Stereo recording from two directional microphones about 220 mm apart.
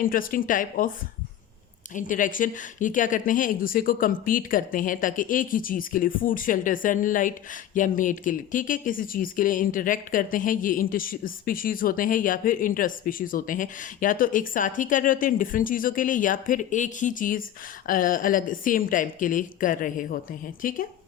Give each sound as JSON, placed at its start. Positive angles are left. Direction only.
{"t": 0.0, "sound": "speech", "side_deg": 40}
{"t": 2.0, "sound": "speech", "side_deg": 35}